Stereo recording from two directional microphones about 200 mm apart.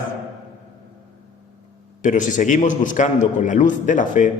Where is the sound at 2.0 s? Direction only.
40° left (ahead or behind).